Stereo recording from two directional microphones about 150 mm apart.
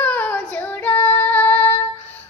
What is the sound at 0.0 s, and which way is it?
Child singing, 10° left (ahead or behind).